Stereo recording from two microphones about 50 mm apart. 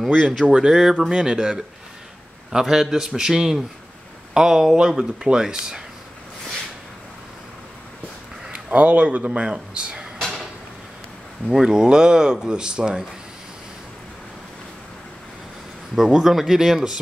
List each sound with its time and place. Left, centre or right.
0.1 s speech: right
0.5 s speech: centre
8.5 s speech: right
11.5 s speech: centre
15.9 s speech: centre